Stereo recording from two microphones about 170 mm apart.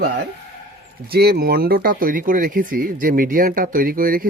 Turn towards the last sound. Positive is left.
turn(degrees=-55)  # may be behind; listen again after turning